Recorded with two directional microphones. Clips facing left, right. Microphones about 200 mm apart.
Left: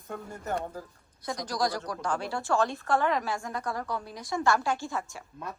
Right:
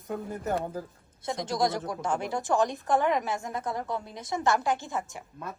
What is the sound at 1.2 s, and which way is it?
A woman's voice, 25° right (ahead or behind).